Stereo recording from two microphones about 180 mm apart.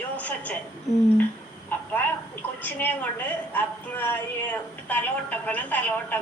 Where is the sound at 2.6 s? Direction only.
10° left (ahead or behind).